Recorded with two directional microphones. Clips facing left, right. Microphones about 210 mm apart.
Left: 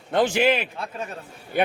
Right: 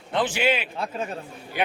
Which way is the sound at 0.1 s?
45° left (ahead or behind).